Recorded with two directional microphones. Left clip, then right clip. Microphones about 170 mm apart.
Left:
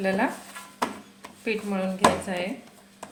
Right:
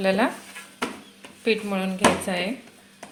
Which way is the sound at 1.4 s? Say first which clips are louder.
Right 5 dB; 30° right (ahead or behind).